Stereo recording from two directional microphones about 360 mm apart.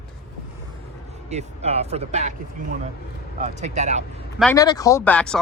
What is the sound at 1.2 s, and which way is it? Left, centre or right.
Speech, centre.